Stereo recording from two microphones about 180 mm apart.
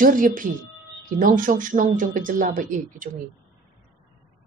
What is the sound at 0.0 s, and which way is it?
A woman's voice, 50° right (ahead or behind).